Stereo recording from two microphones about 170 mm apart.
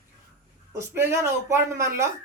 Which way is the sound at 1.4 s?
15° right (ahead or behind).